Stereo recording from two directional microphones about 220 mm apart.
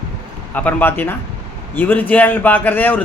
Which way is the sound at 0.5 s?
5° left (ahead or behind).